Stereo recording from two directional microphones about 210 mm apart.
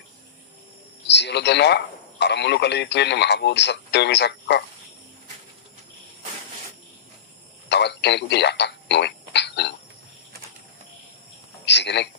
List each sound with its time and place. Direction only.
1.0 s speech: 55° left (ahead or behind)
7.7 s a sound: 55° left (ahead or behind)
11.6 s a man's voice: 55° left (ahead or behind)